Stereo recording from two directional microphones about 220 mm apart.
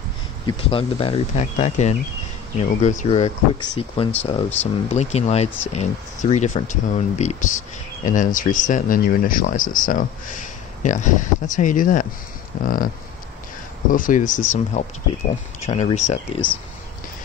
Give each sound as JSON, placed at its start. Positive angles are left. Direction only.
{"t": 0.5, "sound": "speech", "side_deg": 25}
{"t": 13.9, "sound": "speech", "side_deg": 35}